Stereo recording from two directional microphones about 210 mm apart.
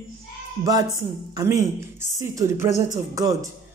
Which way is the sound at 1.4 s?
15° right (ahead or behind).